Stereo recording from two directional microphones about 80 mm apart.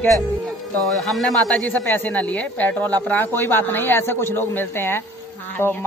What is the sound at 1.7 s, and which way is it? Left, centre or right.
A man's voice, left.